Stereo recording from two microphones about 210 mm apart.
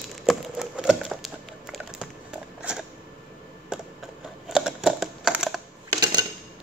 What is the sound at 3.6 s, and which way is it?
Typing, centre (ahead or behind).